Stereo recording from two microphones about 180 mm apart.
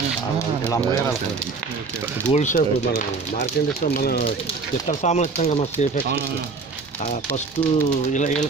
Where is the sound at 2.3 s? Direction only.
40° left (ahead or behind).